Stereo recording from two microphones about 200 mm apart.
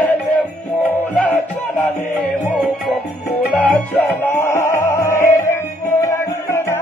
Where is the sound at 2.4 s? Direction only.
10° right (ahead or behind).